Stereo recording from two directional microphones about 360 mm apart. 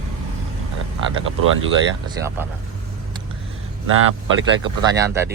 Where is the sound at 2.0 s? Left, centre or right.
Centre.